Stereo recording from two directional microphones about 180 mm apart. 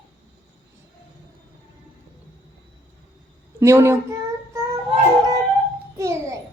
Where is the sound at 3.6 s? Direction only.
15° right (ahead or behind).